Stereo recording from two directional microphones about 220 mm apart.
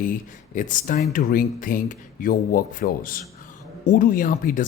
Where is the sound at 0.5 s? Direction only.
35° left (ahead or behind).